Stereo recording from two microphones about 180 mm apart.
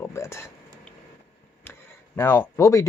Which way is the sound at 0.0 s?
15° left (ahead or behind).